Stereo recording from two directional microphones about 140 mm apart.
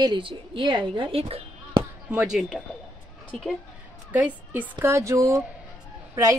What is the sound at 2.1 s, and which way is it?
Speech, 5° right (ahead or behind).